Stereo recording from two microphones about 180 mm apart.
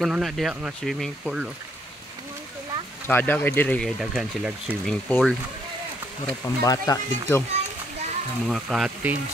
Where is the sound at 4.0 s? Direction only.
5° right (ahead or behind).